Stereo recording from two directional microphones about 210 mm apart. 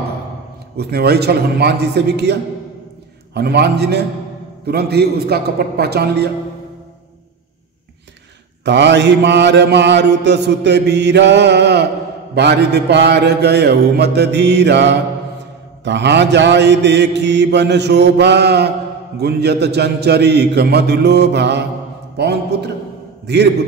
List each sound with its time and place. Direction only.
0.7 s mantra: 50° right (ahead or behind)
8.6 s mantra: 55° right (ahead or behind)
22.1 s a man's voice: 50° right (ahead or behind)